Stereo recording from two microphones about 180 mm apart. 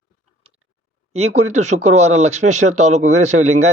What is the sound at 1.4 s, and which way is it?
Speech, 40° right (ahead or behind).